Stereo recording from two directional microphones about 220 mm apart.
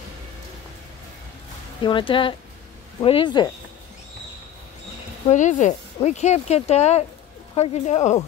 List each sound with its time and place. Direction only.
1.8 s speech: 20° left (ahead or behind)
5.3 s speech: 35° left (ahead or behind)